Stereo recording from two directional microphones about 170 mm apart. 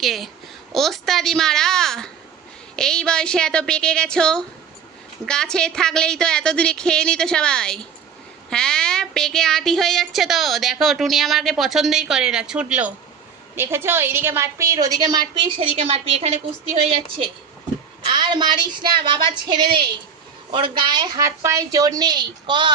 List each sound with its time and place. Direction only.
0.0 s a woman's voice: centre (ahead or behind); by 16.4 s 35° right (ahead or behind)
18.0 s a woman's voice: 25° right (ahead or behind)
20.5 s a woman's voice: 30° right (ahead or behind)